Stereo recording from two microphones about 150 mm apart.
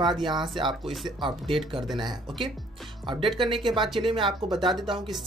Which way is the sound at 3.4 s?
30° right (ahead or behind).